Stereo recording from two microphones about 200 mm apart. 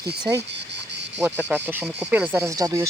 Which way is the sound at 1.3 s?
5° right (ahead or behind).